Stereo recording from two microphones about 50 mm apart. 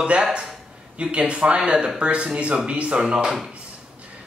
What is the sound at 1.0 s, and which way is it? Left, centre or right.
Speech, right.